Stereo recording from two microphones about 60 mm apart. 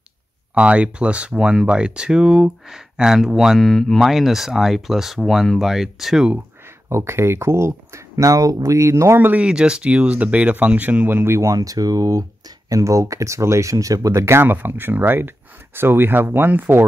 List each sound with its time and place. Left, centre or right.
0.6 s speech: centre
6.9 s speech: right
9.4 s speech: centre
11.2 s speech: right
11.5 s speech: right
14.2 s speech: right